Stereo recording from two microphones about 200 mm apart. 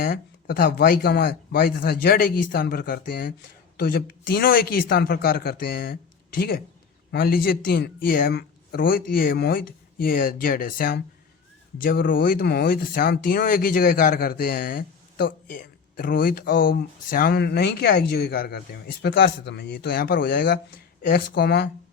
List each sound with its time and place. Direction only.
0.0 s speech: 50° left (ahead or behind)